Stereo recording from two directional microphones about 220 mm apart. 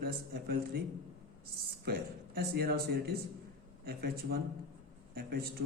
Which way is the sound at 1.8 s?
45° right (ahead or behind).